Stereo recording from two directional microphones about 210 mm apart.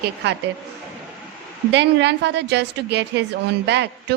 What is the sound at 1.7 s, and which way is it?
A woman's voice, 55° right (ahead or behind).